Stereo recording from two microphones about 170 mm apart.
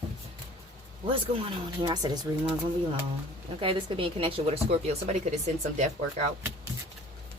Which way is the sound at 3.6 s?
30° right (ahead or behind).